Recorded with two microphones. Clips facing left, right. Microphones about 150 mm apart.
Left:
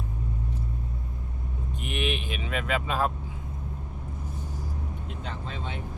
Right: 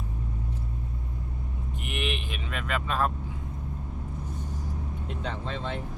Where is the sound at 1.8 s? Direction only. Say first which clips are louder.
Left 3 dB; centre (ahead or behind).